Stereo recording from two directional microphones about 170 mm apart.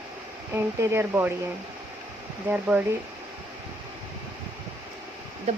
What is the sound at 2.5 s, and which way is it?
Speech, 10° right (ahead or behind).